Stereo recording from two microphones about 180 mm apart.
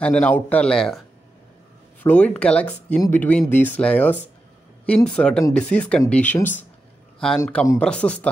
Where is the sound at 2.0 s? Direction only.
10° left (ahead or behind).